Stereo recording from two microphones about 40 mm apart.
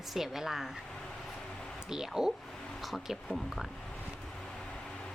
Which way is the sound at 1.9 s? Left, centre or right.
Centre.